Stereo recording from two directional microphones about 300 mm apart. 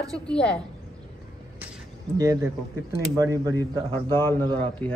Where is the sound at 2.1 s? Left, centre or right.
Centre.